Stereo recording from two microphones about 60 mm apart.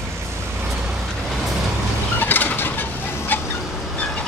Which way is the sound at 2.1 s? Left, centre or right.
Left.